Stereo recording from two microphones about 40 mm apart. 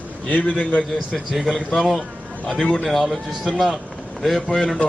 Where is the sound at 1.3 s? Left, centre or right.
Centre.